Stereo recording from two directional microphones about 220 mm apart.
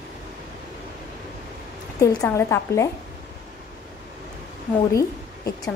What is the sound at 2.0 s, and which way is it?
Speech, 15° left (ahead or behind).